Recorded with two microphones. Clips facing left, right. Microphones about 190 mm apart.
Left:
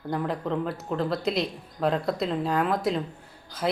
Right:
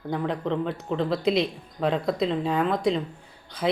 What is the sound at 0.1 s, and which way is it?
Speech, 5° left (ahead or behind).